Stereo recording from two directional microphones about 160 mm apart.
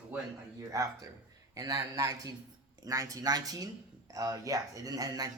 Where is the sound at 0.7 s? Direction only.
20° right (ahead or behind).